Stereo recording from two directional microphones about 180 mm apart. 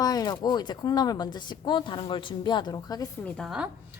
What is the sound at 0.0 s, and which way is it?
A woman's voice, 20° left (ahead or behind).